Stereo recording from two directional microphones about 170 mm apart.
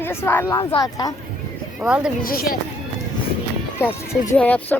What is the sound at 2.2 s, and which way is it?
Speech, 60° left (ahead or behind).